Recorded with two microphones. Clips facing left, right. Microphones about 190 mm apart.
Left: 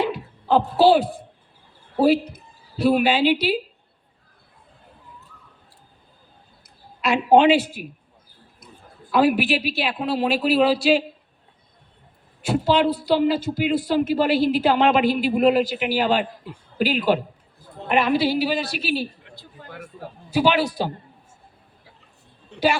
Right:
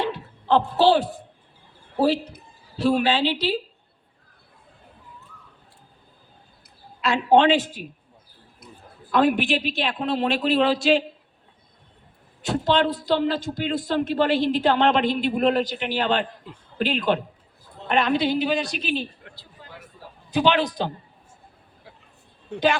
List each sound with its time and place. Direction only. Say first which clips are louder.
0.0 s a sound: left 3 dB; 10° left (ahead or behind)
2.8 s a man's voice: left 3 dB; 10° left (ahead or behind)
7.0 s a man's voice: left 2 dB; 10° left (ahead or behind)
9.1 s a man's voice: left 1 dB; 5° left (ahead or behind)
12.4 s a man's voice: left 2 dB; 10° left (ahead or behind)
19.4 s a sound: left 8 dB; 50° left (ahead or behind)
20.3 s a man's voice: left 1 dB; 10° left (ahead or behind)